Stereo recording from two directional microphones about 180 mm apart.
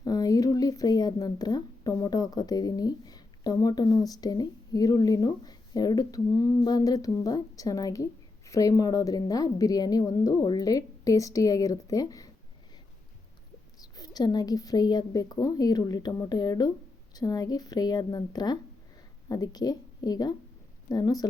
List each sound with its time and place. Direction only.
0.0 s speech: 20° left (ahead or behind)
13.7 s a woman's voice: 20° left (ahead or behind)